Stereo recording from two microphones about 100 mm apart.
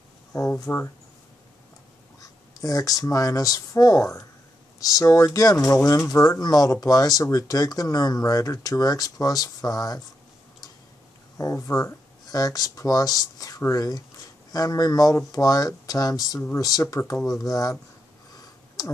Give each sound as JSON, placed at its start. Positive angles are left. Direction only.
{"t": 0.7, "sound": "speech", "side_deg": 20}
{"t": 2.1, "sound": "speech", "side_deg": 35}
{"t": 11.3, "sound": "speech", "side_deg": 35}